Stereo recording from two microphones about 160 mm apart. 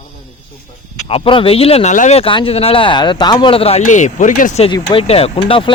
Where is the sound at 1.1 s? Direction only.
35° left (ahead or behind); by 4.6 s 55° left (ahead or behind).